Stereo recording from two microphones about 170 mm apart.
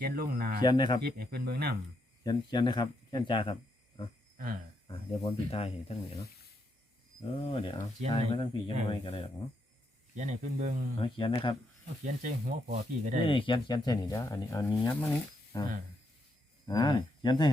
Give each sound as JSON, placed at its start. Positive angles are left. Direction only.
{"t": 0.0, "sound": "speech", "side_deg": -60}
{"t": 0.6, "sound": "speech", "side_deg": 25}
{"t": 1.0, "sound": "speech", "side_deg": -65}
{"t": 2.2, "sound": "speech", "side_deg": 25}
{"t": 4.9, "sound": "speech", "side_deg": 30}
{"t": 7.3, "sound": "speech", "side_deg": 30}
{"t": 10.2, "sound": "speech", "side_deg": -45}
{"t": 11.0, "sound": "speech", "side_deg": 30}
{"t": 12.0, "sound": "speech", "side_deg": -50}
{"t": 13.2, "sound": "speech", "side_deg": 30}